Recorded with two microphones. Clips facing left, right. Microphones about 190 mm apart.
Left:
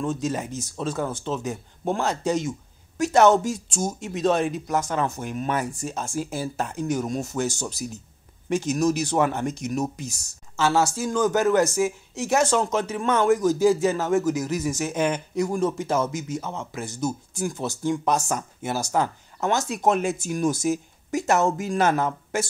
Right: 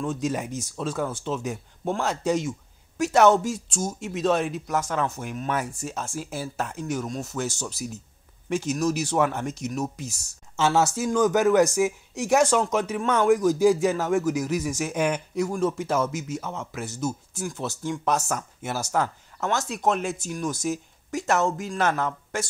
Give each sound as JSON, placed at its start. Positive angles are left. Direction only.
{"t": 0.2, "sound": "speech", "side_deg": -10}
{"t": 10.8, "sound": "speech", "side_deg": -20}
{"t": 13.0, "sound": "speech", "side_deg": 5}
{"t": 13.3, "sound": "speech", "side_deg": -15}